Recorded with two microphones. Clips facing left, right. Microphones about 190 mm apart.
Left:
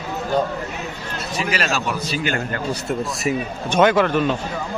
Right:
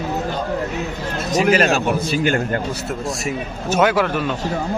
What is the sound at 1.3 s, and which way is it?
A man's voice, 40° right (ahead or behind).